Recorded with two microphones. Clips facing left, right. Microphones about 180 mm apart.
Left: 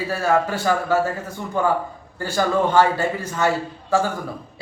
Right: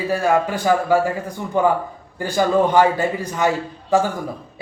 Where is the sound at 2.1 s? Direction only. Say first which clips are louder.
Right 3 dB; 15° right (ahead or behind).